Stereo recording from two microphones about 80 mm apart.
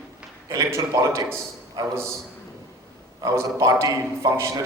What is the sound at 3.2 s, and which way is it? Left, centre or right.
A man's voice, right.